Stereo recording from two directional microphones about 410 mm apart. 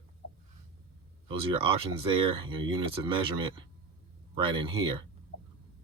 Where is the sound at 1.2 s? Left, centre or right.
Centre.